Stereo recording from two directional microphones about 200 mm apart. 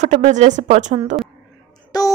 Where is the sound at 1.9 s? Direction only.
20° left (ahead or behind).